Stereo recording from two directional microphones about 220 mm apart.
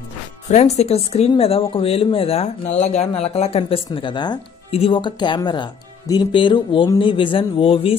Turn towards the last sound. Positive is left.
turn(degrees=25)  # may be behind; listen again after turning